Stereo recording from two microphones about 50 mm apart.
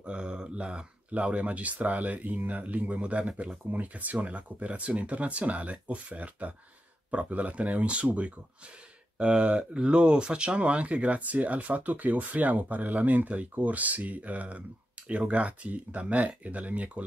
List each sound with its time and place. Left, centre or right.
0.0 s speech: centre